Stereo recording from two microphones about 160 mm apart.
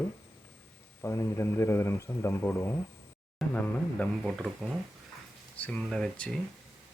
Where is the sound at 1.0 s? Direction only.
15° left (ahead or behind).